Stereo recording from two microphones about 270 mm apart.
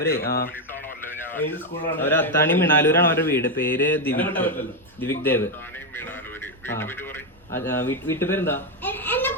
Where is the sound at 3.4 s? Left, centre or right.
Left.